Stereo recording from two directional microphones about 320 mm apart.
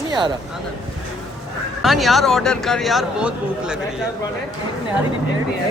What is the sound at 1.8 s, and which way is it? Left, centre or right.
Speech, centre.